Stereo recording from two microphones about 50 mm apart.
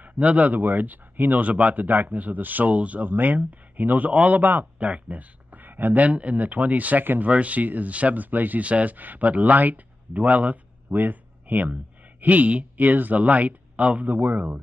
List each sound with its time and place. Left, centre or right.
0.0 s speech: right